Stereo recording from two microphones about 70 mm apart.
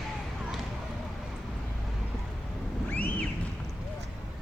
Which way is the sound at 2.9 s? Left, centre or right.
Left.